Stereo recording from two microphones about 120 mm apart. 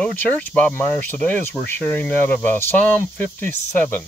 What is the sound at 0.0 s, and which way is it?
Speech, 15° left (ahead or behind).